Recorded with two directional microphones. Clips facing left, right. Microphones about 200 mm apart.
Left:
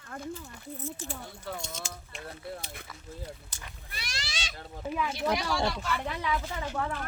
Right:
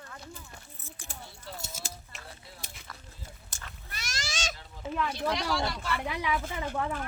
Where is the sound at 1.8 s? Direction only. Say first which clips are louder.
Left 4 dB; 5° right (ahead or behind).